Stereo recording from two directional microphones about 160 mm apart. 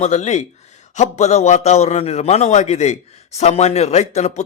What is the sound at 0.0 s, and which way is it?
A man's voice, 45° left (ahead or behind).